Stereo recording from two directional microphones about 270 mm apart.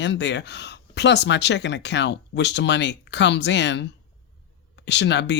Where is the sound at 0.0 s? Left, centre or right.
Left.